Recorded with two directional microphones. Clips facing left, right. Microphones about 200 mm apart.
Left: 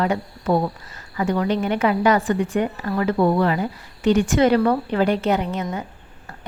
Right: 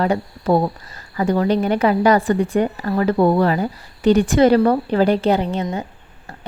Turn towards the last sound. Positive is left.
turn(degrees=-30)  # may be behind; listen again after turning